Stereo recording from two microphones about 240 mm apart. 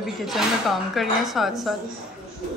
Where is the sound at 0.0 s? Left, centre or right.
Centre.